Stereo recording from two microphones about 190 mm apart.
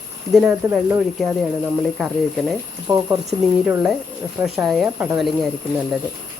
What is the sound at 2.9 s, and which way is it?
Speech, 15° right (ahead or behind).